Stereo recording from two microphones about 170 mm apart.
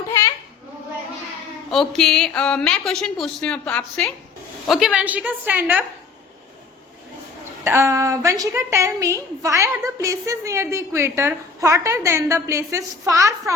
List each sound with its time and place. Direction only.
1.7 s a woman's voice: 5° left (ahead or behind)
7.6 s a woman's voice: 15° right (ahead or behind)